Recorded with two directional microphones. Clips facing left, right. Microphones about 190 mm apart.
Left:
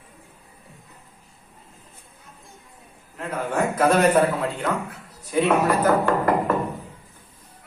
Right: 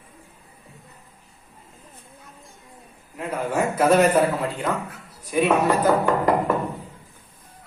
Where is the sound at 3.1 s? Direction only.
10° right (ahead or behind).